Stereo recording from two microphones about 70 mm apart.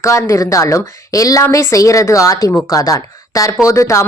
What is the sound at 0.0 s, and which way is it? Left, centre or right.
Speech, left.